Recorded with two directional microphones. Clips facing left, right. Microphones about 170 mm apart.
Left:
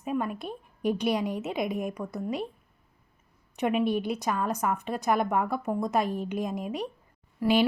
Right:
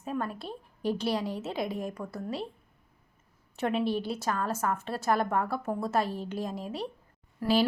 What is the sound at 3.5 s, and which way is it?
A woman's voice, 10° left (ahead or behind).